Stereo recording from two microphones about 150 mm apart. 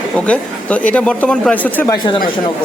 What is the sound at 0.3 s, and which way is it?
Speech, 10° left (ahead or behind).